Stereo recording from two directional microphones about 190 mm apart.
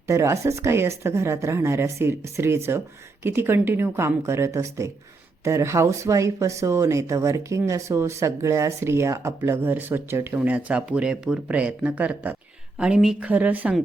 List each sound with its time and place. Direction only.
0.1 s speech: 15° right (ahead or behind)